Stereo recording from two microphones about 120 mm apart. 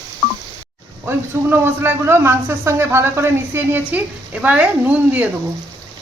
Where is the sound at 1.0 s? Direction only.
20° right (ahead or behind).